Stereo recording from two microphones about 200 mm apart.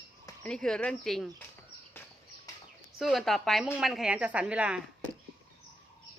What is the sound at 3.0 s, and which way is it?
Speech, centre (ahead or behind).